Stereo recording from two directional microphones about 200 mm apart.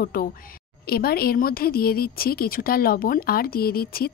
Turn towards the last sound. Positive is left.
turn(degrees=50)  # may be behind; listen again after turning